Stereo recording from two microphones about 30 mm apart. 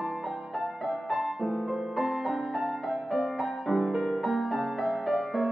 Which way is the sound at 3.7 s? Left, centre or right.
Centre.